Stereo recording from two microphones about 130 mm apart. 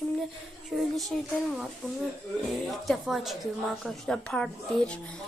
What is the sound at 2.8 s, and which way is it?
Speech, centre (ahead or behind).